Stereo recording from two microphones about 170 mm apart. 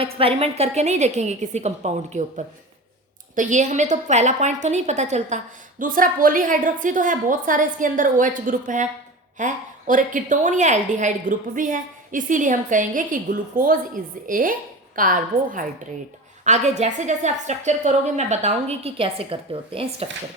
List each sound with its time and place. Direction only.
0.0 s a woman's voice: 35° right (ahead or behind)